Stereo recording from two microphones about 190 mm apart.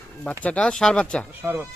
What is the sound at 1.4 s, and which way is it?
Speech, 10° right (ahead or behind).